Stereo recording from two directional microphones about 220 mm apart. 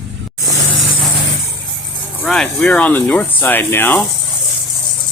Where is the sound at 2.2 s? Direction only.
5° left (ahead or behind).